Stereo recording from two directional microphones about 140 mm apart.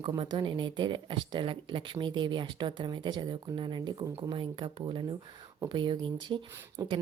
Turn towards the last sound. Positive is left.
turn(degrees=-35)  # may be behind; listen again after turning